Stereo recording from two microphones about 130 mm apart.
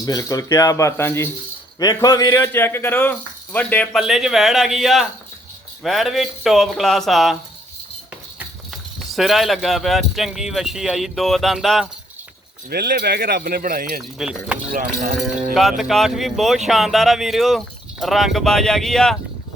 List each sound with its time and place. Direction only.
0.0 s speech: 30° left (ahead or behind)
1.8 s speech: 30° left (ahead or behind); by 3.8 s 15° left (ahead or behind)
3.9 s speech: 5° right (ahead or behind)
8.4 s speech: centre (ahead or behind)
13.3 s speech: 90° right
14.0 s speech: 5° right (ahead or behind)
14.7 s speech: 90° right
15.8 s speech: centre (ahead or behind)